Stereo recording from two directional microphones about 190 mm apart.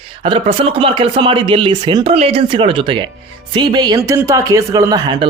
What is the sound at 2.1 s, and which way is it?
Speech, 30° right (ahead or behind).